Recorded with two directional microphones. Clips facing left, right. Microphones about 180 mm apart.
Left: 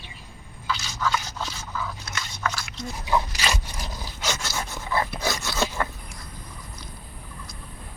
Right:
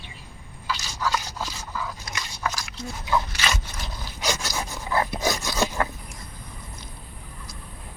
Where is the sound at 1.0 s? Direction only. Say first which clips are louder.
Right 1 dB; 10° right (ahead or behind).